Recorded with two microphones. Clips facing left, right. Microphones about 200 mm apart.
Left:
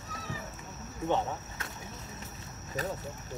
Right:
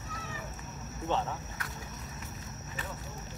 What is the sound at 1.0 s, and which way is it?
Cricket, 15° left (ahead or behind).